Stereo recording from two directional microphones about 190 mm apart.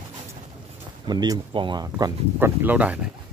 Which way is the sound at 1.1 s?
20° right (ahead or behind).